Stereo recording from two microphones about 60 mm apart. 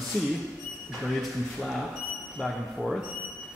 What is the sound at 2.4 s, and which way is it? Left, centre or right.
Speech, centre.